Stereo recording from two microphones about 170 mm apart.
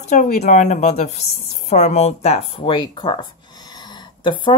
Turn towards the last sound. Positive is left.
turn(degrees=30)  # may be behind; listen again after turning